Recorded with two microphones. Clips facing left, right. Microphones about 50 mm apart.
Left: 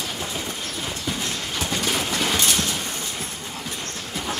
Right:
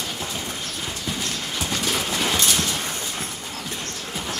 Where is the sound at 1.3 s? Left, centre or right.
Centre.